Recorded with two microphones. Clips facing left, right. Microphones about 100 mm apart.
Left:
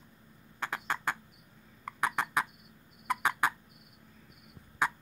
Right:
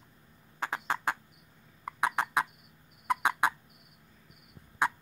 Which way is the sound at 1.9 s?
5° right (ahead or behind).